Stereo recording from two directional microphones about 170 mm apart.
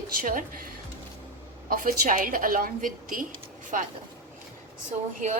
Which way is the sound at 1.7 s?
50° right (ahead or behind).